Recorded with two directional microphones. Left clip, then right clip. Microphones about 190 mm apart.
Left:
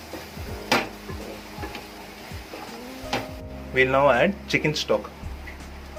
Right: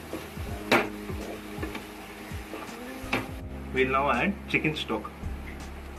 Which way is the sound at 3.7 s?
40° left (ahead or behind).